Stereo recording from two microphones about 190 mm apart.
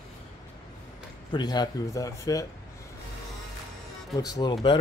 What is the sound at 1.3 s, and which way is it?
Speech, 20° left (ahead or behind).